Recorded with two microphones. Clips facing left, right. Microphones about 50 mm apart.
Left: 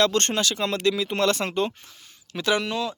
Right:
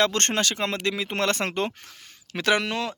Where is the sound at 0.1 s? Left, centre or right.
Right.